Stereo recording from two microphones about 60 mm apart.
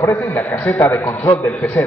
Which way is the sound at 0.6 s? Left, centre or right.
Left.